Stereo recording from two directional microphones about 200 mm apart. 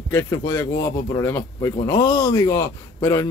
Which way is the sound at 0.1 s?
15° left (ahead or behind).